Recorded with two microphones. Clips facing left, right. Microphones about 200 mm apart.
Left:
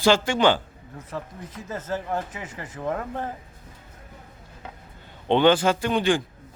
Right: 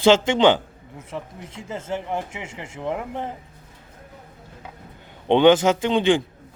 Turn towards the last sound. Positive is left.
turn(degrees=-20)  # may be behind; listen again after turning